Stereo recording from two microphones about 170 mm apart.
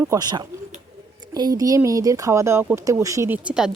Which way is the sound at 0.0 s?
20° right (ahead or behind).